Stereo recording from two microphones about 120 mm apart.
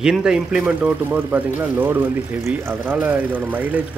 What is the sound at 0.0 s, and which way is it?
Speech, 5° right (ahead or behind).